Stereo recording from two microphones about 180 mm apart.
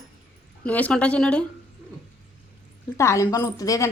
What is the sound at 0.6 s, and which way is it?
Speech, 10° left (ahead or behind).